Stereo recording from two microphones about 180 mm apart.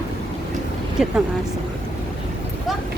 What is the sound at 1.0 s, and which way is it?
Speech, 5° right (ahead or behind).